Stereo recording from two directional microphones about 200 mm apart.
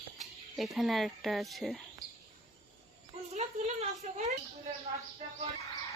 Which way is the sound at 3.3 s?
35° right (ahead or behind).